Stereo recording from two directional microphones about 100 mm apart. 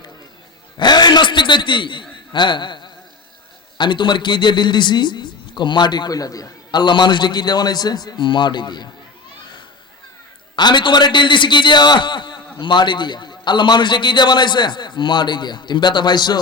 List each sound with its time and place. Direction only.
0.8 s a sound: 45° left (ahead or behind)
3.8 s a man's voice: 50° left (ahead or behind)
10.5 s a man's voice: 50° left (ahead or behind)